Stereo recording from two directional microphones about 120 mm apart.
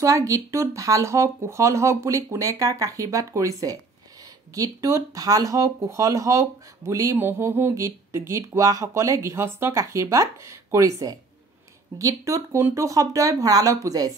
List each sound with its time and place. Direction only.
0.0 s speech: 25° right (ahead or behind)